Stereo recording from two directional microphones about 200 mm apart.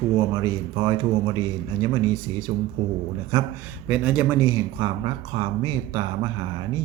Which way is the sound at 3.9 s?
5° right (ahead or behind).